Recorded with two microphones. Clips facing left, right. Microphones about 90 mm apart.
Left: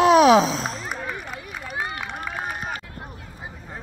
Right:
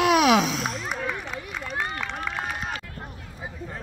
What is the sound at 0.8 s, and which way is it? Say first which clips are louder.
Run: right 1 dB; centre (ahead or behind).